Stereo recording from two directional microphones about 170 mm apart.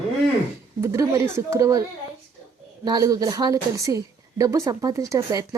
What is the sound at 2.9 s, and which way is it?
A woman's voice, 20° right (ahead or behind).